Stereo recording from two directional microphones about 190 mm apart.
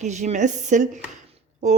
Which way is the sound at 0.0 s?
40° right (ahead or behind).